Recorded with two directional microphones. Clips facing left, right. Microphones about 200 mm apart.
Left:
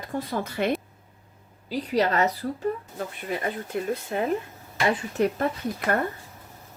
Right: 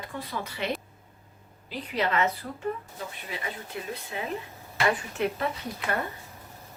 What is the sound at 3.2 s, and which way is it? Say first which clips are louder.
A woman's voice: left 10 dB; 50° left (ahead or behind).